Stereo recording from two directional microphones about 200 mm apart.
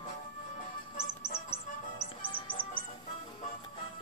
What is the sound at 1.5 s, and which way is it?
Music, 30° left (ahead or behind).